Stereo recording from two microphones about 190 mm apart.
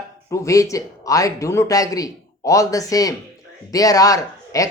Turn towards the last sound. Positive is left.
turn(degrees=20)  # may be behind; listen again after turning